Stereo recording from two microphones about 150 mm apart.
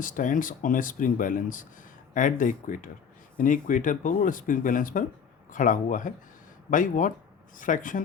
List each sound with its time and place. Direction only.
0.0 s speech: 60° left (ahead or behind)